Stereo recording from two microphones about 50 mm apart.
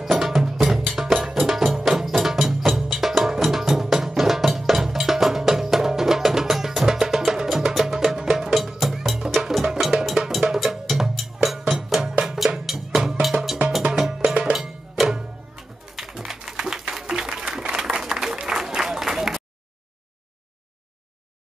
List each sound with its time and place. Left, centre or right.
0.0 s music: centre
16.0 s typing: centre
16.3 s a sound: centre
16.9 s applause: centre